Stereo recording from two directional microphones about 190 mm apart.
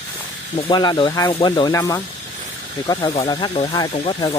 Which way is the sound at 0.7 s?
25° left (ahead or behind).